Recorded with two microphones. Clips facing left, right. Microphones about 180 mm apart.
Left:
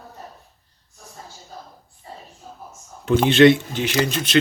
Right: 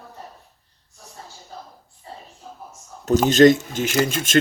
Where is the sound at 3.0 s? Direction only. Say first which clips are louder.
Even; 40° right (ahead or behind).